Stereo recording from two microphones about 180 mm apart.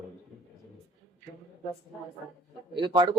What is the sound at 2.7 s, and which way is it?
Speech, 25° right (ahead or behind).